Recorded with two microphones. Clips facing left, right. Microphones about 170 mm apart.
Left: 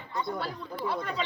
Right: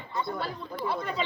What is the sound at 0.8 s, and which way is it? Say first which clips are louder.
Chatter: right 1 dB; 5° right (ahead or behind).